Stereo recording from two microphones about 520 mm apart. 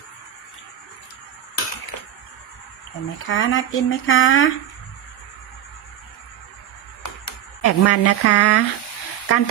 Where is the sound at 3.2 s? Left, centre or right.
Left.